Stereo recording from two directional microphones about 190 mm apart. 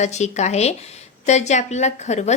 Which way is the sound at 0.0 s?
35° left (ahead or behind).